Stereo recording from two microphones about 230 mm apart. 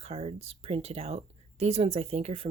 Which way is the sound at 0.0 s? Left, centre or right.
Right.